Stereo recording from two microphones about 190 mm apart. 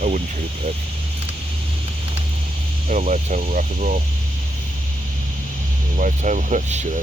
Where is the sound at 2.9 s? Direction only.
35° right (ahead or behind).